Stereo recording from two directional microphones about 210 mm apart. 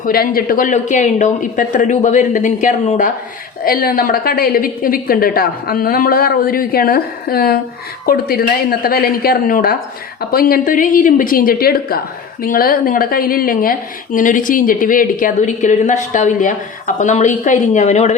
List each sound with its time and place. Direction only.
0.0 s a woman's voice: 45° left (ahead or behind)